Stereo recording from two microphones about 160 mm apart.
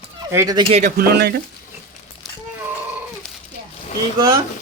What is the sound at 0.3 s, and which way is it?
Speech, 20° right (ahead or behind).